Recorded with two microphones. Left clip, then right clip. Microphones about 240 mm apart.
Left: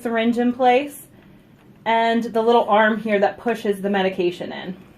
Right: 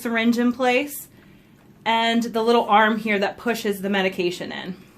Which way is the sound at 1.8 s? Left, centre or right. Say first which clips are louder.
Left 2 dB; right.